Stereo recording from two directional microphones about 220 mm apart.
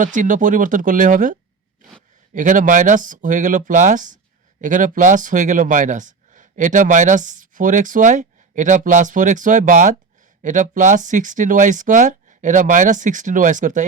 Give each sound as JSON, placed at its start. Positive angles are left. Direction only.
{"t": 0.0, "sound": "speech", "side_deg": -35}